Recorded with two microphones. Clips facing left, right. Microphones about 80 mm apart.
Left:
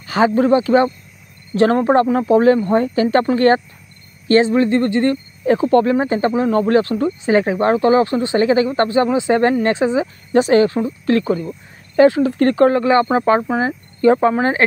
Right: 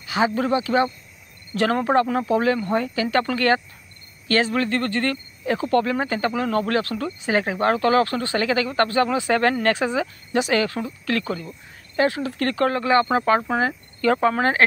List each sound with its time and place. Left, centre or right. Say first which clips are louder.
0.0 s speech: left 7 dB; left
5.4 s speech: left 7 dB; left